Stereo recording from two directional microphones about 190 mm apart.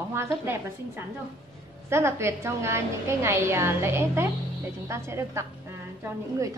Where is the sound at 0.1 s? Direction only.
15° right (ahead or behind).